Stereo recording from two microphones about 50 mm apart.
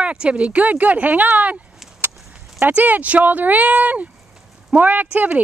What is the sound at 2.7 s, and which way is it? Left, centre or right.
Speech, right.